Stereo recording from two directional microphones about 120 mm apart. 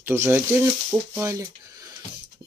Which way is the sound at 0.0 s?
20° right (ahead or behind).